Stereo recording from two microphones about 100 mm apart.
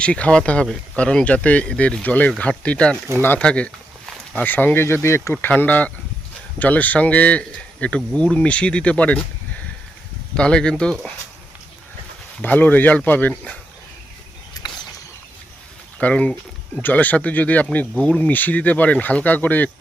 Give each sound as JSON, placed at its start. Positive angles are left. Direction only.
{"t": 0.0, "sound": "speech", "side_deg": 10}
{"t": 10.3, "sound": "speech", "side_deg": 10}
{"t": 12.4, "sound": "speech", "side_deg": 15}
{"t": 14.5, "sound": "a sound", "side_deg": 40}
{"t": 16.0, "sound": "speech", "side_deg": 15}